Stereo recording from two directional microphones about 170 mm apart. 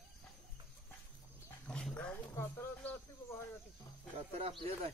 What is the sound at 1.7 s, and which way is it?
Dog, 5° left (ahead or behind).